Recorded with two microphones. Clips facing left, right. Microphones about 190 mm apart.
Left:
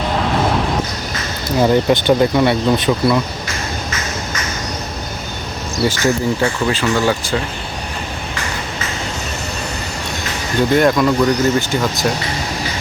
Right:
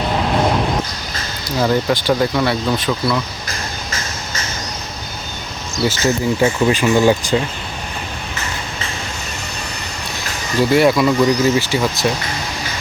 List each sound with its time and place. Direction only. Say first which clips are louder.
1.6 s speech: left 3 dB; 25° left (ahead or behind)
3.5 s a sound: left 1 dB; 30° right (ahead or behind)
6.0 s speech: right 2 dB; 20° right (ahead or behind)
10.6 s speech: even; 5° right (ahead or behind)